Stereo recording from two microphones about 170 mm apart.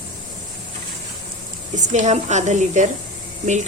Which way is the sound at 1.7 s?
45° right (ahead or behind).